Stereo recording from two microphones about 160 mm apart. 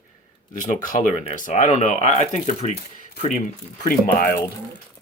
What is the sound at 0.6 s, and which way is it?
Speech, 55° left (ahead or behind).